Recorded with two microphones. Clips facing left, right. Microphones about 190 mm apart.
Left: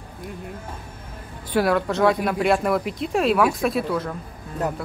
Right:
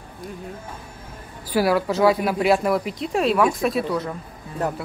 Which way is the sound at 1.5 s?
5° right (ahead or behind).